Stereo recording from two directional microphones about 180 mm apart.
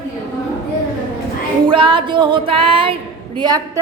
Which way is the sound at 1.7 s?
30° right (ahead or behind).